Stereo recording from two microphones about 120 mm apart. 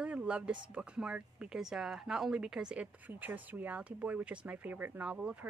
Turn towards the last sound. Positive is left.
turn(degrees=-15)  # may be behind; listen again after turning